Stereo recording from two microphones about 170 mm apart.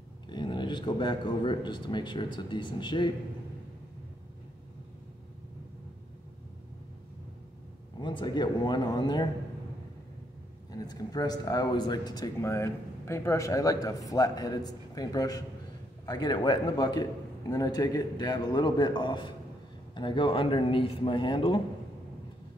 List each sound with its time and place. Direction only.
0.3 s speech: 25° left (ahead or behind)
8.0 s speech: 30° left (ahead or behind)
10.8 s a man's voice: 25° left (ahead or behind)